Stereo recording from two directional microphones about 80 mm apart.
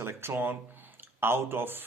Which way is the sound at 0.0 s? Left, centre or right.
Right.